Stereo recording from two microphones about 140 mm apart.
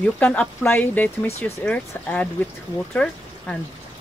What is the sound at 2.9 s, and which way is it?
Speech, 5° left (ahead or behind).